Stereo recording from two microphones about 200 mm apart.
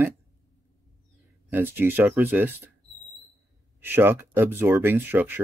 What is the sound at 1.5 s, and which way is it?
Speech, 10° right (ahead or behind).